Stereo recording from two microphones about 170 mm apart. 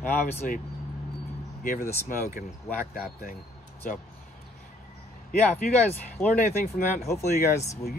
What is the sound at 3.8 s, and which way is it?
Speech, 55° left (ahead or behind).